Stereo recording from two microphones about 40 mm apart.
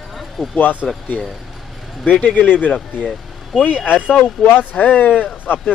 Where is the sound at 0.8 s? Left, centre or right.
Centre.